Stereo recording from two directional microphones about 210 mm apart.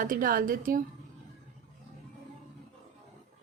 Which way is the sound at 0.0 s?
40° right (ahead or behind).